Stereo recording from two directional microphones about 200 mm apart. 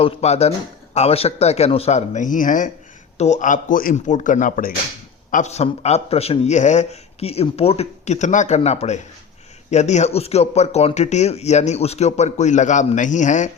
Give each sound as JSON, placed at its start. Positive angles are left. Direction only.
{"t": 0.0, "sound": "a man's voice", "side_deg": 30}